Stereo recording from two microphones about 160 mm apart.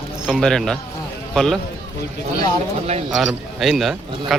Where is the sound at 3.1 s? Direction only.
Centre (ahead or behind).